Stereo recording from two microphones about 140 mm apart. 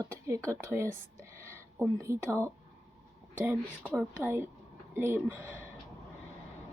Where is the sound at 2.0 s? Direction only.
20° right (ahead or behind).